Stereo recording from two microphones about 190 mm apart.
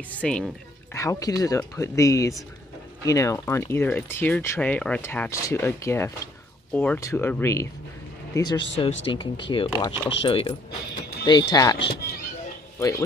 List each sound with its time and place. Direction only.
0.1 s speech: 5° left (ahead or behind)
0.9 s speech: 15° left (ahead or behind)
11.8 s speech: 60° left (ahead or behind)
12.7 s speech: 15° left (ahead or behind)